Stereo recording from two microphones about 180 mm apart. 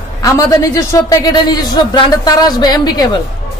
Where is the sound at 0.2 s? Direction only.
15° left (ahead or behind).